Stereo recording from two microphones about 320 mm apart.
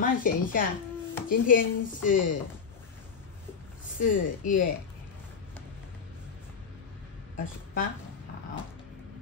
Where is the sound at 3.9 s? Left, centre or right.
Left.